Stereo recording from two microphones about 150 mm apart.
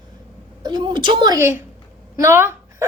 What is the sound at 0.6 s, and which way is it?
A woman's voice, 30° right (ahead or behind).